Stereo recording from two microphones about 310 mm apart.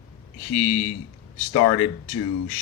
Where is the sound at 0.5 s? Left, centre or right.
Left.